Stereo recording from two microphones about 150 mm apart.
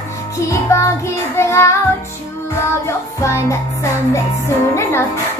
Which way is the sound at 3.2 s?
20° left (ahead or behind).